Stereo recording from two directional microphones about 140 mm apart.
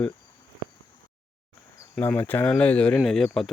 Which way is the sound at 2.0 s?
15° left (ahead or behind).